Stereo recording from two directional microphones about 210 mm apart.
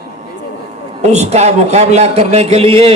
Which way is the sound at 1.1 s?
30° right (ahead or behind).